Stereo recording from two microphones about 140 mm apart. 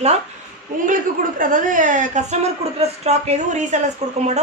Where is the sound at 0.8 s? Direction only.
75° right (ahead or behind); by 3.8 s 55° right (ahead or behind).